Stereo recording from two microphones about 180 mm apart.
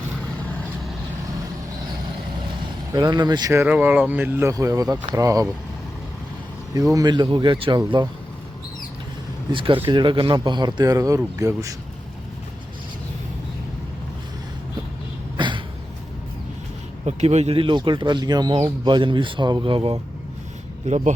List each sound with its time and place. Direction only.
2.9 s speech: 20° right (ahead or behind)
6.7 s speech: 20° right (ahead or behind)
9.5 s speech: 30° right (ahead or behind)
15.4 s a sound: 25° right (ahead or behind)
17.1 s speech: 35° right (ahead or behind)